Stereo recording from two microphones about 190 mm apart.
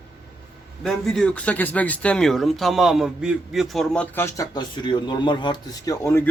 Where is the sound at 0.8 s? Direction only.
Centre (ahead or behind).